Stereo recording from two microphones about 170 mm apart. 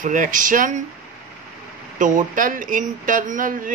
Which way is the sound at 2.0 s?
50° right (ahead or behind).